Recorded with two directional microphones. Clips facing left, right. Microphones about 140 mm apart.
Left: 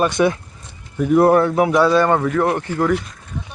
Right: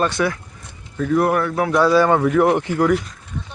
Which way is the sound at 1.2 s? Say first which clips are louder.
Left 7 dB; 25° left (ahead or behind).